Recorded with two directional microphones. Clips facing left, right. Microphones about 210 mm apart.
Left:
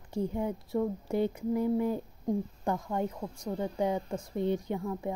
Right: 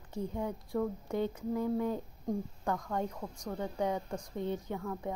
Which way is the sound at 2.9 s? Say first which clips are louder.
Left 3 dB; 10° left (ahead or behind).